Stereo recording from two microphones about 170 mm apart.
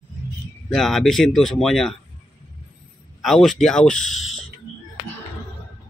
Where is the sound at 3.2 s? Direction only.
Centre (ahead or behind).